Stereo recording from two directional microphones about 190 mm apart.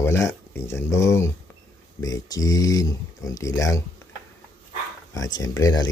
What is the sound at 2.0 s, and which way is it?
Speech, 20° left (ahead or behind).